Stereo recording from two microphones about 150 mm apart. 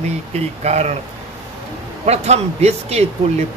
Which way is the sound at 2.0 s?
45° right (ahead or behind).